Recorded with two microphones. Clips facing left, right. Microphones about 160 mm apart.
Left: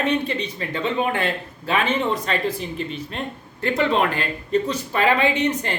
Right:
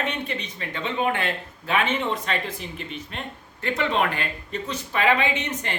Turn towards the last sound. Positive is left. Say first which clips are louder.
# left 6 dB
turn(degrees=35)  # may be behind; listen again after turning